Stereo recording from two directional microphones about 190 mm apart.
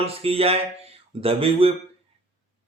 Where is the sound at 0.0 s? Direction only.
30° right (ahead or behind).